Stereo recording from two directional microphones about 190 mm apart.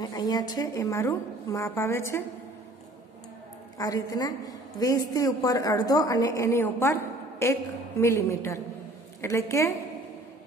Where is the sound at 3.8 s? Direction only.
20° left (ahead or behind).